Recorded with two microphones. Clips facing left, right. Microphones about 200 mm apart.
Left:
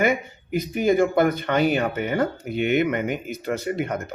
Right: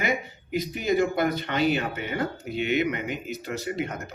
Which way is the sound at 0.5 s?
50° left (ahead or behind).